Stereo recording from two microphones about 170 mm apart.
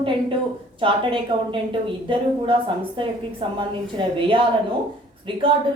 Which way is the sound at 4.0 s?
25° right (ahead or behind).